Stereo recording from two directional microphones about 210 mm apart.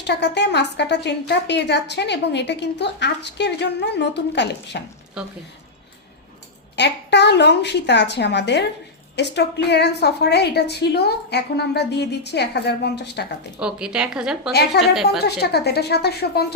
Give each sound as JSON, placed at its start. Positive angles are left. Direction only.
{"t": 0.0, "sound": "a woman's voice", "side_deg": 55}
{"t": 6.7, "sound": "a woman's voice", "side_deg": 55}
{"t": 13.6, "sound": "a woman's voice", "side_deg": -5}
{"t": 14.7, "sound": "a woman's voice", "side_deg": 50}